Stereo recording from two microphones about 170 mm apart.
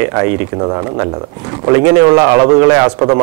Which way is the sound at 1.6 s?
20° right (ahead or behind).